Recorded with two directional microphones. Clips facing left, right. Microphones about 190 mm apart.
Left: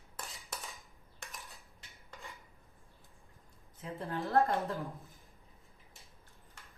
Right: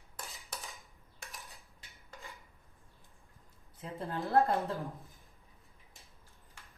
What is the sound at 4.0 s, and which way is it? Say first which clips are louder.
Speech: right 1 dB; 35° right (ahead or behind).